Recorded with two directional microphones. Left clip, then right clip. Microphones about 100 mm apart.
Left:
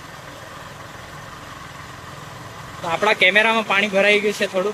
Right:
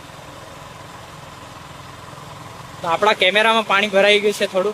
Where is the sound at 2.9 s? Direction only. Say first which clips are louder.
Right 1 dB; 35° right (ahead or behind).